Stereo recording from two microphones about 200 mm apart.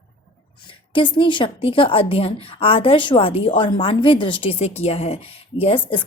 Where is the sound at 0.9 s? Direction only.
25° left (ahead or behind).